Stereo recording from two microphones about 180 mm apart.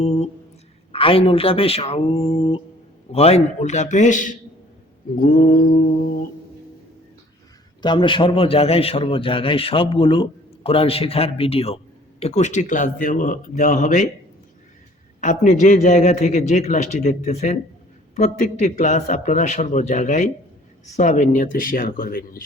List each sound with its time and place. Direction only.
0.0 s a sound: 35° left (ahead or behind)
0.9 s a man's voice: 30° left (ahead or behind)
5.2 s a man's voice: 55° left (ahead or behind)
7.8 s a man's voice: 25° left (ahead or behind); by 14.1 s 45° left (ahead or behind)
15.2 s a man's voice: 45° left (ahead or behind)